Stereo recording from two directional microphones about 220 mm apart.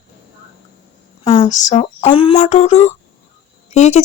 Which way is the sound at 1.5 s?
35° left (ahead or behind).